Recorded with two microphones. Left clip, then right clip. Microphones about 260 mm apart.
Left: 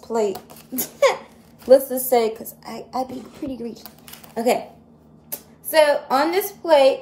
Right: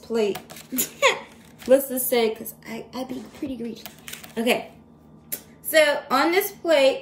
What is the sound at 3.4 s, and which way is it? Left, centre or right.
Speech, centre.